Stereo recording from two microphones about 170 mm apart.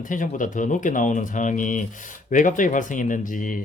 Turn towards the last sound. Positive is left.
turn(degrees=50)  # may be behind; listen again after turning